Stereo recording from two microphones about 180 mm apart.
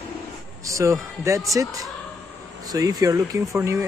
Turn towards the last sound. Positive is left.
turn(degrees=-15)  # may be behind; listen again after turning